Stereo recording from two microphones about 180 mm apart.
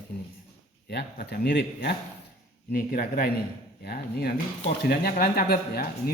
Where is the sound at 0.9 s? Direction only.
65° left (ahead or behind).